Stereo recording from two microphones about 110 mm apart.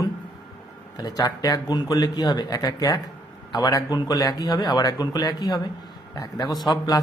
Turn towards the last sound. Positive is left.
turn(degrees=40)  # may be behind; listen again after turning